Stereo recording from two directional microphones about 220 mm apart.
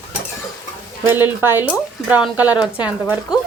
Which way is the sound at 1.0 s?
10° right (ahead or behind).